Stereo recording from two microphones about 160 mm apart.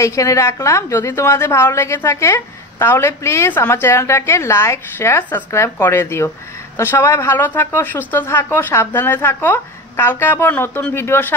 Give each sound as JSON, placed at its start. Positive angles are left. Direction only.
{"t": 0.0, "sound": "a woman's voice", "side_deg": 20}